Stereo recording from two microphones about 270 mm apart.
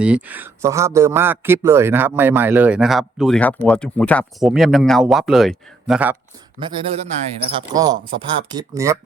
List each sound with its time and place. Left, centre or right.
0.0 s speech: centre
6.6 s speech: centre